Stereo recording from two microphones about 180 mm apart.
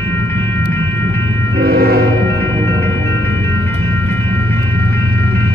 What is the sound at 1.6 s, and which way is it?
Train, 60° right (ahead or behind).